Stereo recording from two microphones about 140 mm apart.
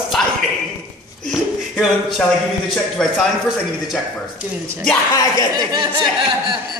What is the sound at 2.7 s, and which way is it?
A man's voice, centre (ahead or behind).